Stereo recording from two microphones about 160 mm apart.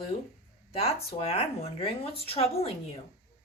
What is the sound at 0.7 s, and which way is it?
A woman's voice, 40° left (ahead or behind).